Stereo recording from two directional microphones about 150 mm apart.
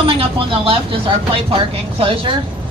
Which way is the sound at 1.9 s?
35° right (ahead or behind).